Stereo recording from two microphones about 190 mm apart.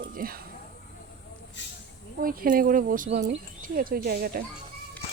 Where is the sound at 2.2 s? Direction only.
50° right (ahead or behind).